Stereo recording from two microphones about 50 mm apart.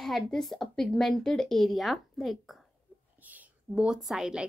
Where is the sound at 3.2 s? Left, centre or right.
Right.